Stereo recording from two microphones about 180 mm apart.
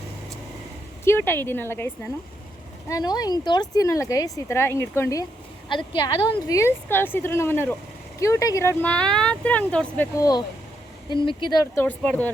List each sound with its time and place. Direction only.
1.0 s speech: 15° left (ahead or behind)
2.9 s speech: 20° left (ahead or behind)
5.6 s speech: 25° left (ahead or behind)
6.3 s speech: 15° left (ahead or behind)
10.2 s speech: 20° left (ahead or behind)